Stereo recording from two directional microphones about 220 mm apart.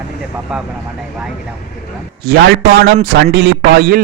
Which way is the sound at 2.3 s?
45° right (ahead or behind).